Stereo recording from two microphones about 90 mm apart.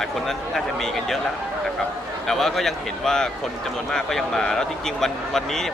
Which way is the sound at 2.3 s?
5° left (ahead or behind).